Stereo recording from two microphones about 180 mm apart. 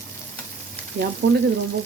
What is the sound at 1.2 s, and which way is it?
Speech, 60° right (ahead or behind).